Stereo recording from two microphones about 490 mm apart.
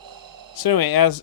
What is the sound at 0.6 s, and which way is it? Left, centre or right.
Speech, left.